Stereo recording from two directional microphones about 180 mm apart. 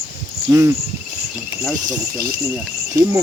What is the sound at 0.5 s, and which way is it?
Speech, 15° right (ahead or behind).